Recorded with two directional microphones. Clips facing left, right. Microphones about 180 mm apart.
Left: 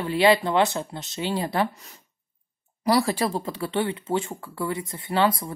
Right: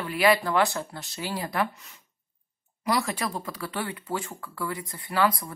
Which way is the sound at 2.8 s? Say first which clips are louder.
Left 6 dB; 35° left (ahead or behind).